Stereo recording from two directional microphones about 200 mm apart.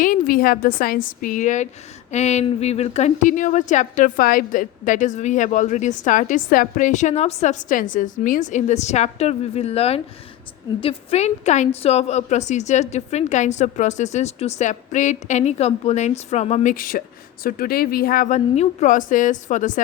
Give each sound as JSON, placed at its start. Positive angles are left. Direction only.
{"t": 0.0, "sound": "a woman's voice", "side_deg": 45}